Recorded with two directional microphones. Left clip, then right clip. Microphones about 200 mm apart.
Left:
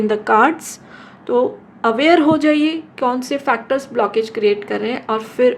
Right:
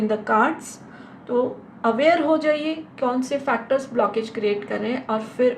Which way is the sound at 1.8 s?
50° left (ahead or behind).